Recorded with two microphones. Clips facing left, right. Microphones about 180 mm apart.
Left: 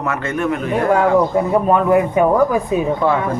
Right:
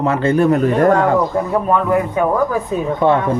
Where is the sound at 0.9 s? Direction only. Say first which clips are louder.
Even; 10° left (ahead or behind).